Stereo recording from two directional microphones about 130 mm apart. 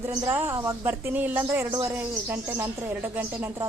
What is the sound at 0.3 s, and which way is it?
Speech, 15° right (ahead or behind).